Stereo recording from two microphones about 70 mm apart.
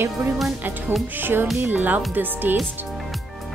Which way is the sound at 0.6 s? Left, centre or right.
Right.